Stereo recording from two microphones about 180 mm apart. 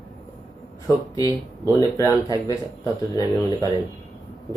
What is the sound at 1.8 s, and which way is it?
Speech, 15° left (ahead or behind).